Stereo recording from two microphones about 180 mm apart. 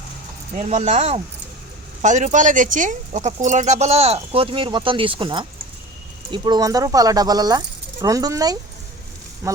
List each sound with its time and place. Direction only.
0.5 s speech: 40° right (ahead or behind); by 9.6 s 15° right (ahead or behind)